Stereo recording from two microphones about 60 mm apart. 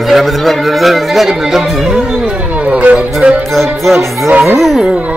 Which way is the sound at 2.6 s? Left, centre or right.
Right.